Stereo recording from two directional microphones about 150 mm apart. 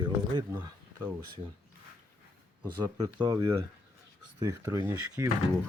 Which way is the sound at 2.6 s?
25° right (ahead or behind).